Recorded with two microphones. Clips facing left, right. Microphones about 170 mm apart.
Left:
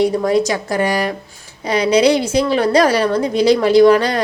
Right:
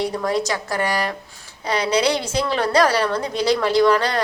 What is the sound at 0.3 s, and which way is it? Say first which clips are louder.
A woman's voice: left 6 dB; 15° left (ahead or behind).